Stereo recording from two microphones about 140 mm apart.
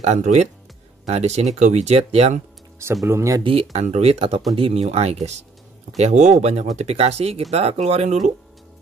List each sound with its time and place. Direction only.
0.0 s speech: 55° right (ahead or behind)
2.8 s speech: 20° right (ahead or behind)
3.7 s speech: 50° right (ahead or behind)